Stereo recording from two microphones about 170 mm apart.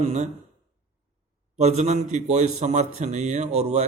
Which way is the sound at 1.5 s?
40° right (ahead or behind).